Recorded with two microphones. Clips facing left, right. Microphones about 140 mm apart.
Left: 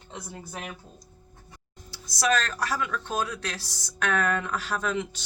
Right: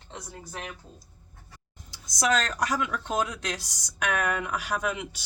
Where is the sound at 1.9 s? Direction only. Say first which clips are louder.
Even; 20° right (ahead or behind).